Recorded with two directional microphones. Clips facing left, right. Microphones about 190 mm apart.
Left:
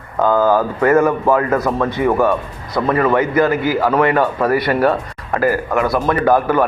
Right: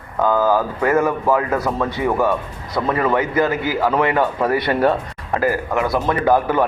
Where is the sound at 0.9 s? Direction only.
15° right (ahead or behind).